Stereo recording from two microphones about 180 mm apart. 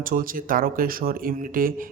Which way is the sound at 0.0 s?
50° right (ahead or behind).